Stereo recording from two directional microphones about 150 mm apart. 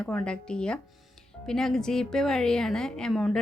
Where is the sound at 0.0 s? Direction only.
5° left (ahead or behind).